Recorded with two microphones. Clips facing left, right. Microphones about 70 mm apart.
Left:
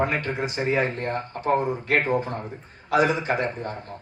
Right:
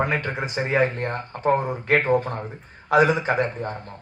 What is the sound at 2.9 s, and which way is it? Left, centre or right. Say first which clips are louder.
Speech: right 3 dB; right.